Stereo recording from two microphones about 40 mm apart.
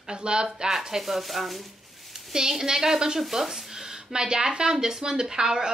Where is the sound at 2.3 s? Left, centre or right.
Centre.